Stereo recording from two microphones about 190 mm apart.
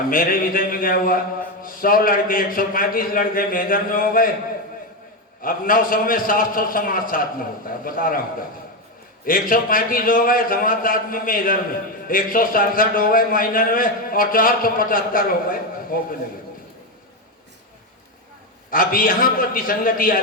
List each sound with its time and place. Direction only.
0.1 s mantra: 50° left (ahead or behind)
5.4 s mantra: 50° left (ahead or behind)
18.7 s mantra: 50° left (ahead or behind)